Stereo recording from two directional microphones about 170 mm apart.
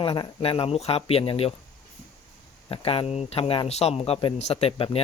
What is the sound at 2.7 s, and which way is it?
Speech, 35° left (ahead or behind).